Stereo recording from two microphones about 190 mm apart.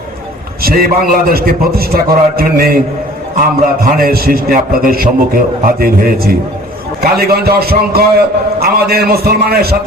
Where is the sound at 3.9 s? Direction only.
50° right (ahead or behind).